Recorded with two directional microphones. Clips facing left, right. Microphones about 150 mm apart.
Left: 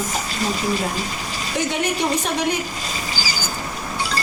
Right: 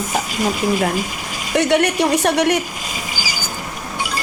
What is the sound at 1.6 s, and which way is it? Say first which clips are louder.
A woman's voice: right 7 dB; 70° right (ahead or behind).